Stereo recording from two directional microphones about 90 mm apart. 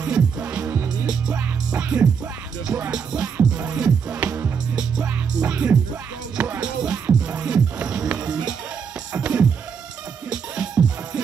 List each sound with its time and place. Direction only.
0.0 s music: 15° right (ahead or behind)
5.5 s music: 20° right (ahead or behind)